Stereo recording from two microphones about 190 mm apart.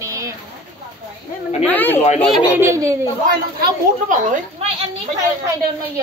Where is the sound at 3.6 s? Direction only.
45° right (ahead or behind).